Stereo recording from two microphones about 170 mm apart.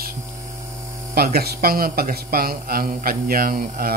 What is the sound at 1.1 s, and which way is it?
Speech, 65° right (ahead or behind).